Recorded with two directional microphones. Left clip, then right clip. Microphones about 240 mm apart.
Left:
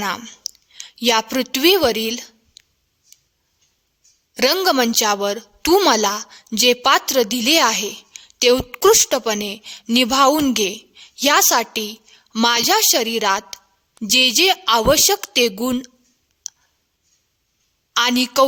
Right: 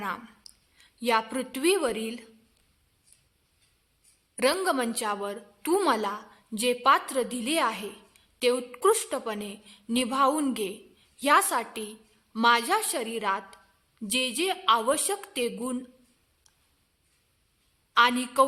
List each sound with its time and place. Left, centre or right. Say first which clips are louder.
0.9 s a woman's voice: left 8 dB; left
4.4 s a woman's voice: left 9 dB; left
17.9 s a woman's voice: left 5 dB; left